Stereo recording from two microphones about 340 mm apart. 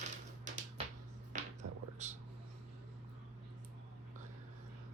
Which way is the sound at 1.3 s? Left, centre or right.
Right.